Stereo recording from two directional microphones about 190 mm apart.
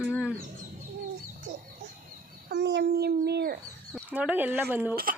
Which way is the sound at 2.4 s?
65° right (ahead or behind).